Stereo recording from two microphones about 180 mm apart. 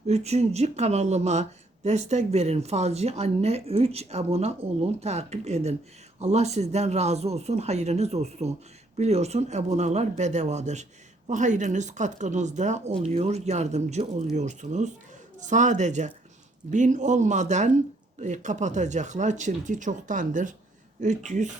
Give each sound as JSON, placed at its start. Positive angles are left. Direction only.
{"t": 0.1, "sound": "speech", "side_deg": -35}